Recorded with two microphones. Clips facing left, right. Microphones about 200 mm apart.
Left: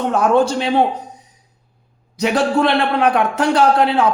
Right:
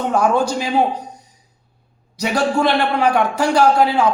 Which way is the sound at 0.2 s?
Centre (ahead or behind).